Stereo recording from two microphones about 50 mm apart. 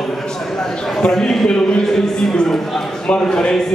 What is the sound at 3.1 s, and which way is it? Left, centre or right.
Speech, centre.